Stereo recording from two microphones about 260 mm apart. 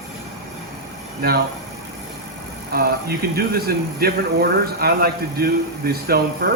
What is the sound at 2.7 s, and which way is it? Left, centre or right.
A man's voice, right.